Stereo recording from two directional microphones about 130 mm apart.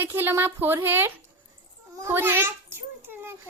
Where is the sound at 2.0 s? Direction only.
15° right (ahead or behind).